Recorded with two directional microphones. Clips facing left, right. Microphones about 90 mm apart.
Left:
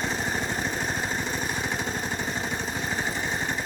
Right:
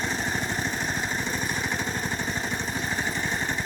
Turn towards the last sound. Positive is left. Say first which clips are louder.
# even
turn(degrees=25)  # may be behind; listen again after turning